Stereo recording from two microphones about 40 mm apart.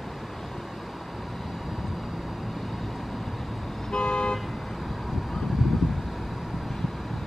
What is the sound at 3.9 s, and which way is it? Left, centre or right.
Vehicle, left.